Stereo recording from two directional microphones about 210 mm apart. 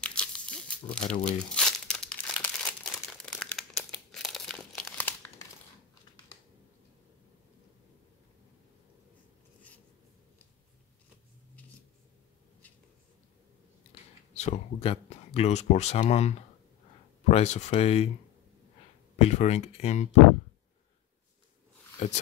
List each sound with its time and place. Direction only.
0.0 s crunch: 5° left (ahead or behind)
1.2 s crumpling: 5° left (ahead or behind)
14.3 s speech: 30° left (ahead or behind)
19.1 s speech: 30° left (ahead or behind)